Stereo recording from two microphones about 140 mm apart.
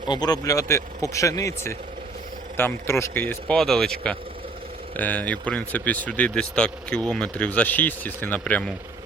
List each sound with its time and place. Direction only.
0.1 s speech: 30° left (ahead or behind)
3.6 s speech: 5° left (ahead or behind)